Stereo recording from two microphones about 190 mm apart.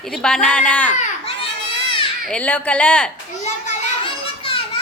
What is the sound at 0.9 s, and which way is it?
Baby cry, 35° left (ahead or behind).